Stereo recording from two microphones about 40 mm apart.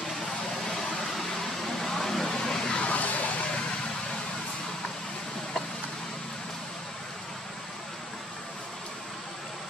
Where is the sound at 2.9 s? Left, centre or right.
Left.